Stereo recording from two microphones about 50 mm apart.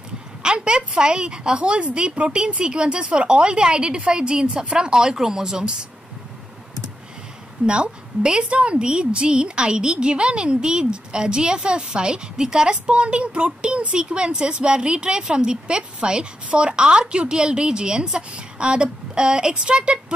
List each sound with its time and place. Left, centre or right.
0.4 s a woman's voice: centre
7.6 s a woman's voice: centre